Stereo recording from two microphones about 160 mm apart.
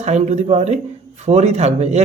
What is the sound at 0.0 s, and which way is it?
Speech, 45° right (ahead or behind).